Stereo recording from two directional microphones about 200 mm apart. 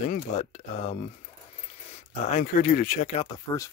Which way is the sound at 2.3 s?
40° left (ahead or behind).